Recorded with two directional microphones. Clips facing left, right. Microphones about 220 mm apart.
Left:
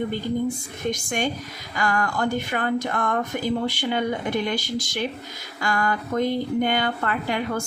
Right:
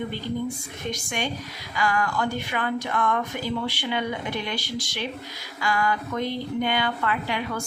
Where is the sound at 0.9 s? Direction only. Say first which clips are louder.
Left 4 dB; 45° left (ahead or behind).